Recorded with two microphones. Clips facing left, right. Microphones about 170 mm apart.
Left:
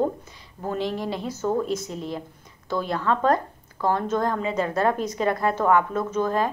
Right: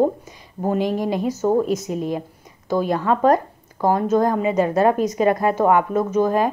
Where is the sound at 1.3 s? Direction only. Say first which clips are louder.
Right 6 dB; 40° right (ahead or behind).